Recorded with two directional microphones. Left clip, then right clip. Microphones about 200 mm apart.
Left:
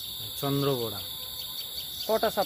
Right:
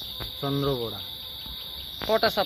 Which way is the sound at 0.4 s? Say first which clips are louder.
Even; 15° left (ahead or behind).